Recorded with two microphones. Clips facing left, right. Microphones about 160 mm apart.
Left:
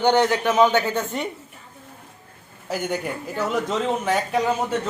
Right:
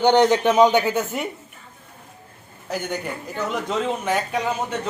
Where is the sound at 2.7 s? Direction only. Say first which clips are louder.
Left 1 dB; 5° left (ahead or behind).